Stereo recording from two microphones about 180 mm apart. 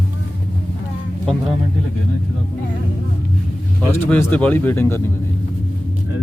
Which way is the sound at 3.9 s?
10° left (ahead or behind).